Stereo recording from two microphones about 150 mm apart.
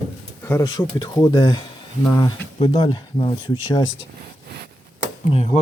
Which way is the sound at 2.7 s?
30° left (ahead or behind).